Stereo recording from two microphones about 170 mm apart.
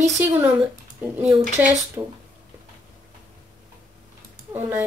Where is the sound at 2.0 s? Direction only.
20° right (ahead or behind).